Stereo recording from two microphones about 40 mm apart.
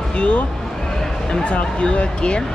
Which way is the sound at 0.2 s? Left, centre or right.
Left.